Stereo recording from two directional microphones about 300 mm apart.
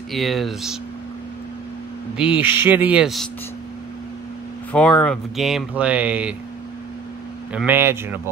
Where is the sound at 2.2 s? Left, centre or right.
Centre.